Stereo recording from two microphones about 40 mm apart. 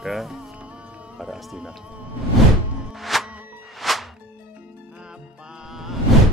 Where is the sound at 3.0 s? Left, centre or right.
Centre.